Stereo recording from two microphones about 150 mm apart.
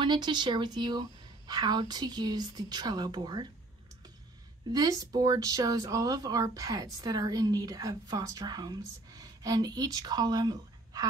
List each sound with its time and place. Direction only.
0.0 s speech: 30° right (ahead or behind)
4.6 s speech: 25° right (ahead or behind)